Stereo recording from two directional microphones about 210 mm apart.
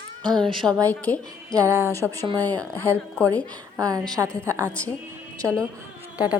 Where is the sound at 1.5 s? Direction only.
15° right (ahead or behind).